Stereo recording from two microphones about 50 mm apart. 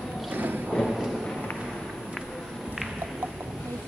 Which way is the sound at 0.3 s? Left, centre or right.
Right.